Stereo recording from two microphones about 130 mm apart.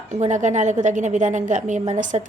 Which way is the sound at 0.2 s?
70° right (ahead or behind).